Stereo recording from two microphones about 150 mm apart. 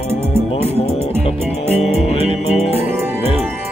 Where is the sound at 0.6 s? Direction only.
45° left (ahead or behind).